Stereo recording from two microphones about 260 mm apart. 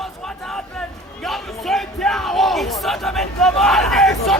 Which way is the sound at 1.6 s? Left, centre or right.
Centre.